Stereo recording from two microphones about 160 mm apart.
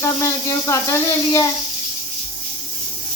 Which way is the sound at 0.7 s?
15° left (ahead or behind).